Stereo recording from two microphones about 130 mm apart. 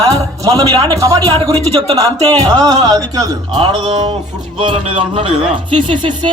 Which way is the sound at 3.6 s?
40° right (ahead or behind).